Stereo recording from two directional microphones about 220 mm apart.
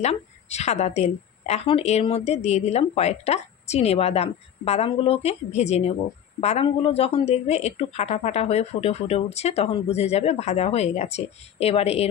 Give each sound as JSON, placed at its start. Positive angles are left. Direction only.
{"t": 0.0, "sound": "speech", "side_deg": 30}